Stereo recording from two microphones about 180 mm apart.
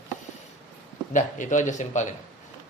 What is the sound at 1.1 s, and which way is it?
Speech, 45° left (ahead or behind).